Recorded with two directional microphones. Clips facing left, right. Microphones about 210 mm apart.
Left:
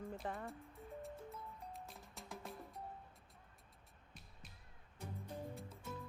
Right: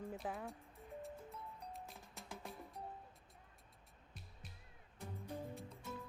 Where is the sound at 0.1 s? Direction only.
Centre (ahead or behind).